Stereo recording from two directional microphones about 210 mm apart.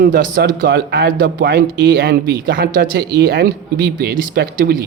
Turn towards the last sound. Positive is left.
turn(degrees=-45)  # may be behind; listen again after turning